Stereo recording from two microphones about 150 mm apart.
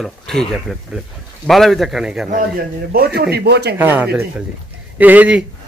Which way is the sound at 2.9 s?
90° right.